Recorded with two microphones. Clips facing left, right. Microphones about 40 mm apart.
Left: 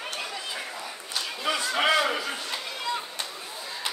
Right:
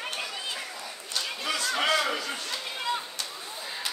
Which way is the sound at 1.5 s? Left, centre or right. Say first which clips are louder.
Left 3 dB; centre.